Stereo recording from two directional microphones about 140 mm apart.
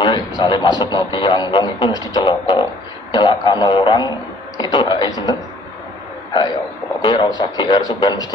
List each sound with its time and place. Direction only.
0.0 s a man's voice: 30° left (ahead or behind)
7.0 s speech: 30° left (ahead or behind)